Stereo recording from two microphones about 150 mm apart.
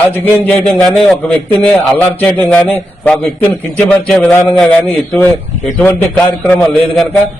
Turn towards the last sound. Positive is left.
turn(degrees=5)  # may be behind; listen again after turning